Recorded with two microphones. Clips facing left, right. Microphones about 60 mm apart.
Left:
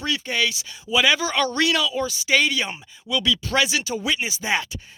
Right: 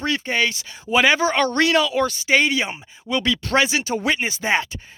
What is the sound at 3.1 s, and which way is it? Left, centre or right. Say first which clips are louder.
Speech: right 2 dB; right.